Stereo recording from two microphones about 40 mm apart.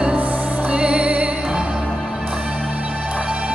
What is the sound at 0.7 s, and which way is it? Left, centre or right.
Music, right.